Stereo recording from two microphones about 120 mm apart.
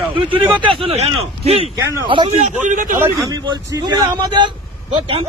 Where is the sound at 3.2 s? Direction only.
30° right (ahead or behind).